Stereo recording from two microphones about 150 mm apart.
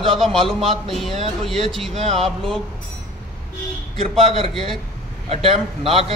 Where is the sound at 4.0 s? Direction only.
40° right (ahead or behind).